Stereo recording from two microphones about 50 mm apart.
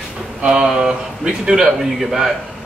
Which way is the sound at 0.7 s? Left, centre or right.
Centre.